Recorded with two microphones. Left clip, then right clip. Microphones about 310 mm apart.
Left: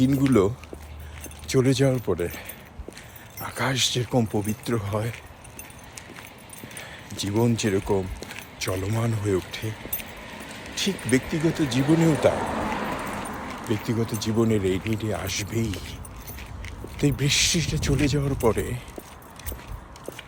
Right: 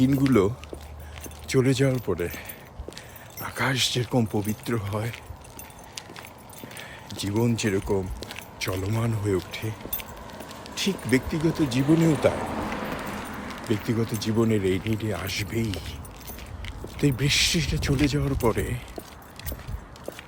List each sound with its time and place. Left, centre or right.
0.0 s speech: centre
3.4 s speech: centre
7.1 s speech: centre
12.4 s a sound: left
13.7 s speech: centre